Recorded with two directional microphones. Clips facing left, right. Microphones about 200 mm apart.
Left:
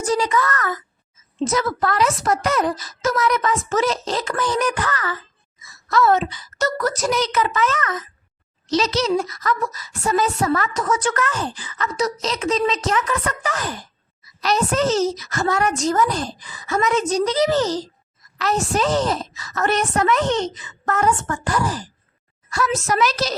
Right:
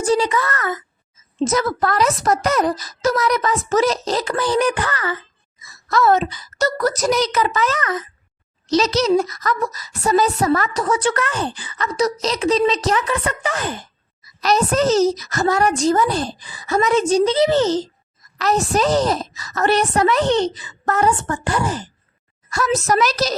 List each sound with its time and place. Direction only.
0.0 s a child's voice: 30° right (ahead or behind)
1.5 s speech: 40° right (ahead or behind)
14.4 s speech: 40° right (ahead or behind)
18.3 s speech: 40° right (ahead or behind)
22.4 s speech: 40° right (ahead or behind)